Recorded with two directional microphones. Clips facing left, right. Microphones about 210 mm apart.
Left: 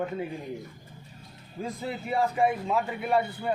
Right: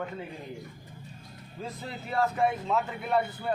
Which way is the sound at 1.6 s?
10° left (ahead or behind).